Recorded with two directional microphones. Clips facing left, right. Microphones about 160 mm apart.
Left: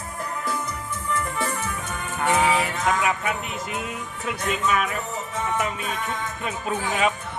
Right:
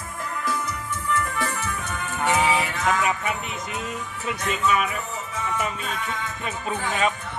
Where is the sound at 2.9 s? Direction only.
Centre (ahead or behind).